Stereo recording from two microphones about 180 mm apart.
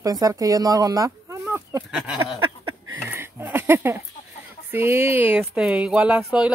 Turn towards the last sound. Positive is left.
turn(degrees=-5)  # may be behind; listen again after turning